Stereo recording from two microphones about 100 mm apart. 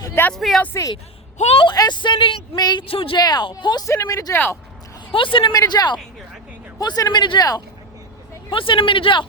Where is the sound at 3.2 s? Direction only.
45° left (ahead or behind).